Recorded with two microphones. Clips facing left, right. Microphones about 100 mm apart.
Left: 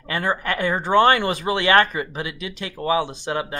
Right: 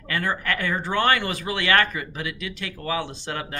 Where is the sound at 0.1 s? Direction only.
25° left (ahead or behind).